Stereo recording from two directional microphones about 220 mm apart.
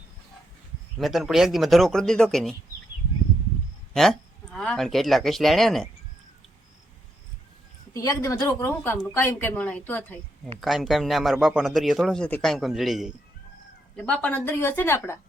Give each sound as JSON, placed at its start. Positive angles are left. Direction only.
{"t": 0.9, "sound": "speech", "side_deg": 0}
{"t": 3.9, "sound": "speech", "side_deg": 0}
{"t": 7.9, "sound": "a woman's voice", "side_deg": 15}